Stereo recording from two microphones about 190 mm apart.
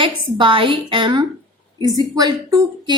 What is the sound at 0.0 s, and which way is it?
A woman's voice, 25° right (ahead or behind).